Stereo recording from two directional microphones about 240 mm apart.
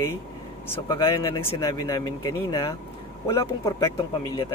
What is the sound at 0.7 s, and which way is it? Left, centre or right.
Speech, centre.